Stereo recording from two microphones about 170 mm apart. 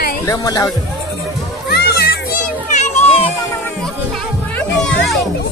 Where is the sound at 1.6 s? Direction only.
70° left (ahead or behind).